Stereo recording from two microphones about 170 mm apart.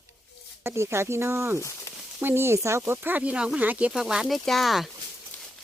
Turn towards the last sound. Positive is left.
turn(degrees=10)  # may be behind; listen again after turning